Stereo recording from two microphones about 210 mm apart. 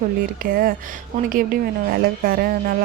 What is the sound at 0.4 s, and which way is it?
A woman's voice, 45° right (ahead or behind).